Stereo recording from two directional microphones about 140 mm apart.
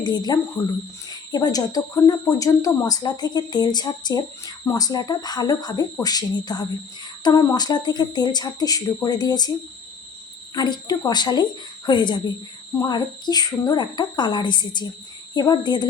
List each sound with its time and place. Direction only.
0.0 s speech: 30° left (ahead or behind)
10.5 s a woman's voice: 30° left (ahead or behind)